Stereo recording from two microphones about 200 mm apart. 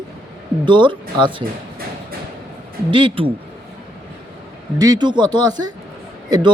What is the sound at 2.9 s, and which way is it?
Speech, 25° right (ahead or behind).